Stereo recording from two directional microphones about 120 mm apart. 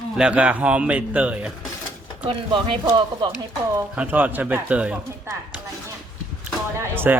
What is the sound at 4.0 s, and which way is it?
Speech, 10° right (ahead or behind).